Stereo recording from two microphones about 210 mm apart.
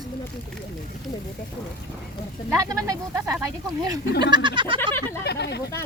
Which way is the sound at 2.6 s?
15° right (ahead or behind).